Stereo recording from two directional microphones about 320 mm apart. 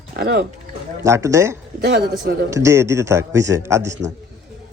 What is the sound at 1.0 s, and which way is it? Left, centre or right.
Speech, centre.